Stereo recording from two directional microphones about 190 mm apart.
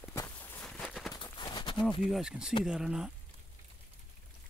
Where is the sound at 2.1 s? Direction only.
5° right (ahead or behind).